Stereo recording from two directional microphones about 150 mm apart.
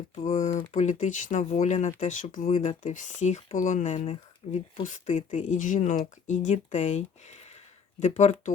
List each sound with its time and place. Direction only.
0.2 s speech: 55° left (ahead or behind)
4.8 s speech: 55° left (ahead or behind)
7.4 s a sound: 50° left (ahead or behind)